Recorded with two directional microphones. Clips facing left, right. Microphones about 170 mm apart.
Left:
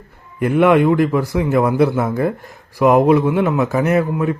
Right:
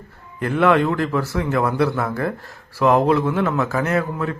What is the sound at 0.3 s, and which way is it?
A man's voice, 15° left (ahead or behind).